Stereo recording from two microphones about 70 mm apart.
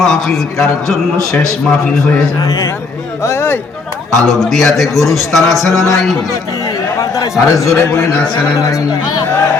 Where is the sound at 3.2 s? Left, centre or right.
Left.